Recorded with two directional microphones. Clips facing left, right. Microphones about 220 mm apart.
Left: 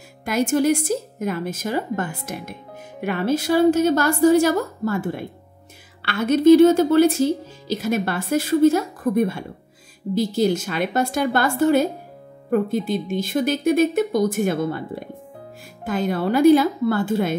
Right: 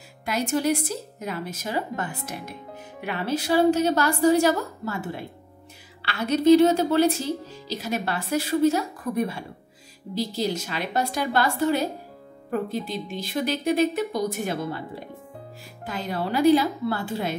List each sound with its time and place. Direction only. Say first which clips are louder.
0.2 s speech: left 5 dB; 45° left (ahead or behind)
15.8 s speech: left 7 dB; 50° left (ahead or behind)